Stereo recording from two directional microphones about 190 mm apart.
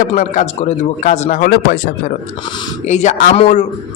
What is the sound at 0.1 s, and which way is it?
A man's voice, 35° left (ahead or behind).